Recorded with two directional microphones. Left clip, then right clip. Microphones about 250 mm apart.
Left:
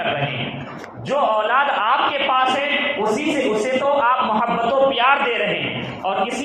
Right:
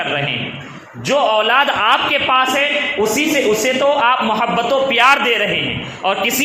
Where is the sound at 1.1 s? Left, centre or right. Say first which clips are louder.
Right 4 dB; right.